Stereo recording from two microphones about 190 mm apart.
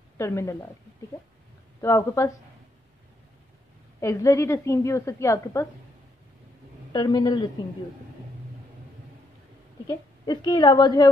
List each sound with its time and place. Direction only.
0.2 s a woman's voice: 15° left (ahead or behind)
1.8 s a woman's voice: 15° left (ahead or behind)
4.0 s a woman's voice: 15° left (ahead or behind)
6.9 s a man's voice: 20° left (ahead or behind)
9.8 s a woman's voice: 20° left (ahead or behind)